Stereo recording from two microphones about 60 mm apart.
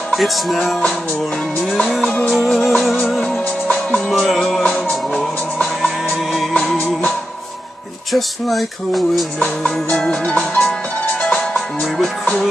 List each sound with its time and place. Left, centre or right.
0.1 s speech: centre
1.9 s music: centre
4.2 s music: centre
8.1 s speech: centre
9.4 s music: centre